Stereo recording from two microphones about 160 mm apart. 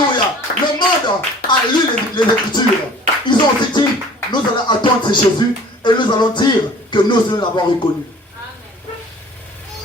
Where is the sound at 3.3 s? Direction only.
30° left (ahead or behind).